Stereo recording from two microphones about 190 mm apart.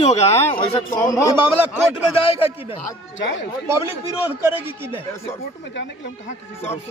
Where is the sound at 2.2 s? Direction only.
30° left (ahead or behind).